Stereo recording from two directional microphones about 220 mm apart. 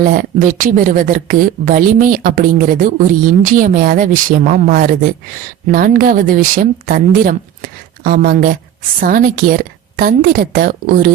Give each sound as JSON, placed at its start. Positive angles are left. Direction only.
{"t": 0.0, "sound": "speech", "side_deg": -40}